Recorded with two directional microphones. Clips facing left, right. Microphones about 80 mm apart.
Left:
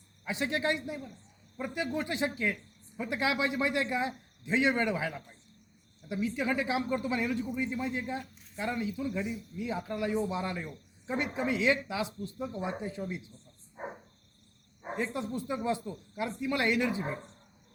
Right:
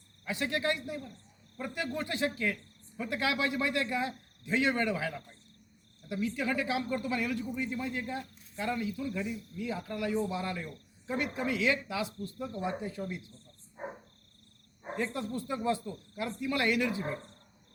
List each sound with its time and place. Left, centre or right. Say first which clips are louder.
0.3 s speech: left 1 dB; left
14.8 s speech: left 1 dB; centre